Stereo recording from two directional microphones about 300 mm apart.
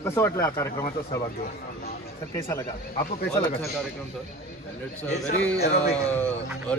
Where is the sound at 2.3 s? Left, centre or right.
Centre.